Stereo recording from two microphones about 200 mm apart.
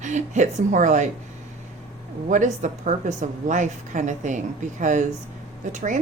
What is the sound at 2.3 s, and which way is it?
A woman's voice, 40° right (ahead or behind).